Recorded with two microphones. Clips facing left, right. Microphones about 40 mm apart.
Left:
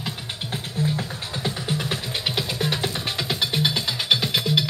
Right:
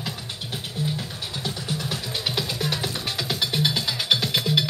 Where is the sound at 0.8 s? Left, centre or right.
Left.